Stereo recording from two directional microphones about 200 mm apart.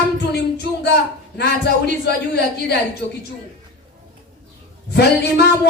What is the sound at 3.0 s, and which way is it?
Speech, 55° left (ahead or behind).